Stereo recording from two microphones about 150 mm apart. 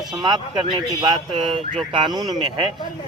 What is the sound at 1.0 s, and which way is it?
Speech, 35° right (ahead or behind).